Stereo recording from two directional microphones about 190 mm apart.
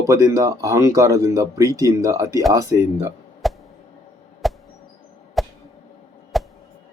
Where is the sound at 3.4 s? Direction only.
Centre (ahead or behind).